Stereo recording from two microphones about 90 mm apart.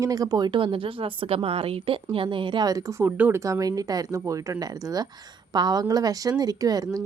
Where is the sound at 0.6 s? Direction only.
75° right (ahead or behind).